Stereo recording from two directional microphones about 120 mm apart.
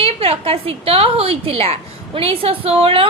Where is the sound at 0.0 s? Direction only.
55° right (ahead or behind).